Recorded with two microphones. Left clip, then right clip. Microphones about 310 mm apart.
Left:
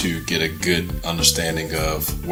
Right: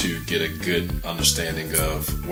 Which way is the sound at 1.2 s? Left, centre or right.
Left.